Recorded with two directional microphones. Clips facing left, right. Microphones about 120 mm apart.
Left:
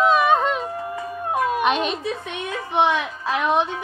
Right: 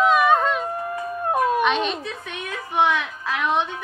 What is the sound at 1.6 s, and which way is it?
A child's voice, 40° left (ahead or behind).